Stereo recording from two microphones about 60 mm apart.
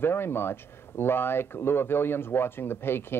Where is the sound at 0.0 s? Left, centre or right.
Left.